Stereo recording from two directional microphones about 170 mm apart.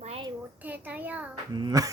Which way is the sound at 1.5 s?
25° right (ahead or behind).